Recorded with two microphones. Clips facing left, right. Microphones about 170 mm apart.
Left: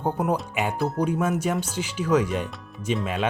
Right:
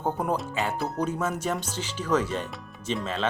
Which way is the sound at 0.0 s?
10° left (ahead or behind).